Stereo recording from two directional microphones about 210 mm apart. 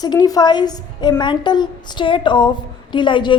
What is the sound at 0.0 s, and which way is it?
A woman's voice, 20° left (ahead or behind).